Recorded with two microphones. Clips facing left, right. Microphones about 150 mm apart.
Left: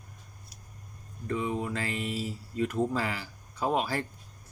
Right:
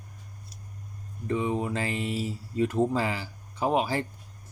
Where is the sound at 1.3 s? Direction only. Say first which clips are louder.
Right 3 dB; 25° right (ahead or behind).